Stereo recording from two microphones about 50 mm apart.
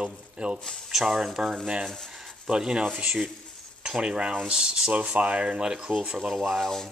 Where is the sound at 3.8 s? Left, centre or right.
Centre.